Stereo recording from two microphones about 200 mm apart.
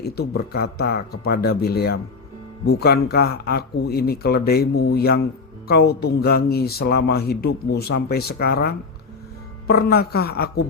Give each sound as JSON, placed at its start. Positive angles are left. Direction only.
{"t": 0.0, "sound": "speech", "side_deg": 50}